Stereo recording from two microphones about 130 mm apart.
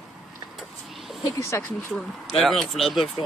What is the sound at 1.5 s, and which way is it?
Speech, 20° left (ahead or behind).